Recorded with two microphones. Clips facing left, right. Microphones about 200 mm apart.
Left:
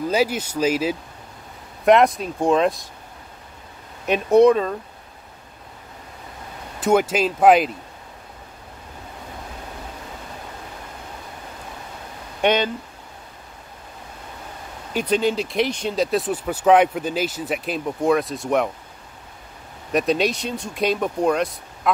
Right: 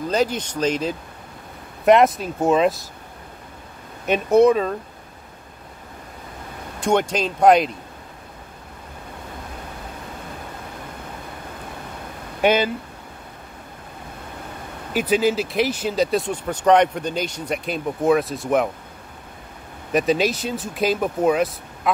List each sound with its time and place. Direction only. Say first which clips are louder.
0.1 s speech: right 1 dB; 10° left (ahead or behind)
4.0 s speech: left 1 dB; centre (ahead or behind)
6.8 s speech: left 2 dB; 5° left (ahead or behind)
12.4 s speech: right 1 dB; 5° right (ahead or behind)
14.9 s speech: right 1 dB; 5° right (ahead or behind)
19.9 s speech: right 1 dB; centre (ahead or behind)